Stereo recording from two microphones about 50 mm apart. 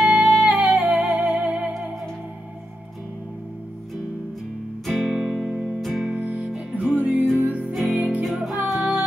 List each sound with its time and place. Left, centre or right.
0.0 s music: right
4.8 s music: centre
5.8 s music: centre
6.0 s music: right
7.7 s music: centre
8.7 s child singing: right